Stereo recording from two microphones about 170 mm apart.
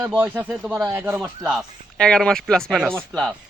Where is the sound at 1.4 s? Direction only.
Centre (ahead or behind).